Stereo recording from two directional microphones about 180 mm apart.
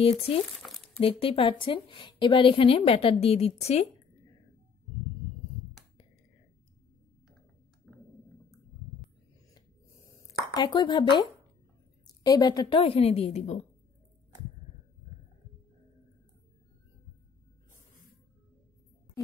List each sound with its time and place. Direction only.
0.0 s a woman's voice: 30° left (ahead or behind)
0.6 s crumpling: centre (ahead or behind)
1.0 s a woman's voice: 30° left (ahead or behind)
7.9 s clicking: centre (ahead or behind)
10.2 s a woman's voice: 25° left (ahead or behind); by 13.6 s 40° left (ahead or behind)